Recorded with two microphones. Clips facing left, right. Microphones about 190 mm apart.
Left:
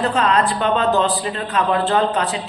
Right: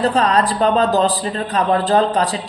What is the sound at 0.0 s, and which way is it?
Speech, 35° right (ahead or behind).